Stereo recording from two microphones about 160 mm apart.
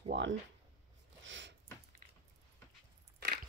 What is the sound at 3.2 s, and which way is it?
Biting, 80° right.